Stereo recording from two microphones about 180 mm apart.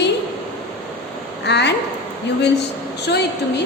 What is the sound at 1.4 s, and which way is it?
Speech, 70° left (ahead or behind).